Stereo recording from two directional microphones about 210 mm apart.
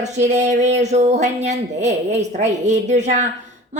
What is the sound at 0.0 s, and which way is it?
Speech, 35° right (ahead or behind).